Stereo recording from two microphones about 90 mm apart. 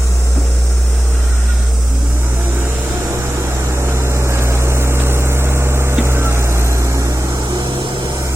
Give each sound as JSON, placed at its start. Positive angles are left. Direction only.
{"t": 3.8, "sound": "vehicle", "side_deg": -30}